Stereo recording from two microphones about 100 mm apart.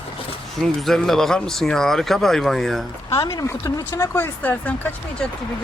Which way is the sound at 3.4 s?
35° left (ahead or behind).